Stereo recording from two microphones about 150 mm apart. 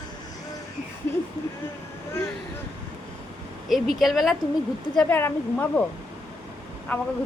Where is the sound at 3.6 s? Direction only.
Centre (ahead or behind).